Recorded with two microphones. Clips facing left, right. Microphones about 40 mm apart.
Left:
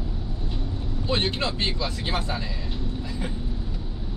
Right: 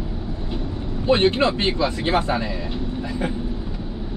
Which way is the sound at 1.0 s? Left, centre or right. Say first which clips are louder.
Right 9 dB; right.